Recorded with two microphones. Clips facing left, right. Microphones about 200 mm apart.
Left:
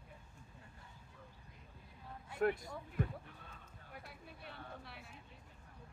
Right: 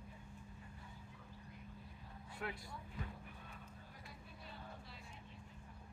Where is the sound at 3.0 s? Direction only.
55° left (ahead or behind).